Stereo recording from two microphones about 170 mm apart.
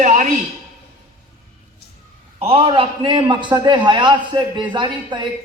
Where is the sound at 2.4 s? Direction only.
35° right (ahead or behind).